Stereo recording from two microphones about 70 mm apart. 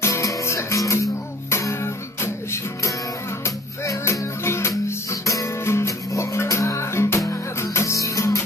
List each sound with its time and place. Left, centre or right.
0.0 s music: left